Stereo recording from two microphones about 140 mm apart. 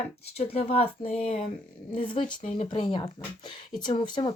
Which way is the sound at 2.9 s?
35° left (ahead or behind).